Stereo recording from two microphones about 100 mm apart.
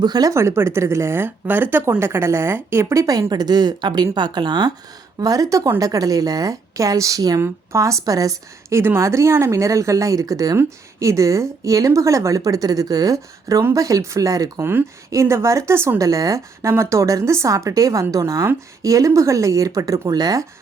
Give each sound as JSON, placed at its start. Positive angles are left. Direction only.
{"t": 0.0, "sound": "speech", "side_deg": -40}
{"t": 0.3, "sound": "speech", "side_deg": -25}
{"t": 14.6, "sound": "speech", "side_deg": -25}
{"t": 16.0, "sound": "speech", "side_deg": -35}